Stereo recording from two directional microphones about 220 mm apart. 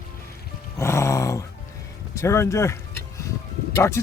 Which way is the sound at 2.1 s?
10° left (ahead or behind).